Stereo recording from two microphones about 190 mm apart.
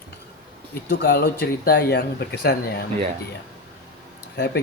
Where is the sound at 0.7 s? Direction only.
55° left (ahead or behind).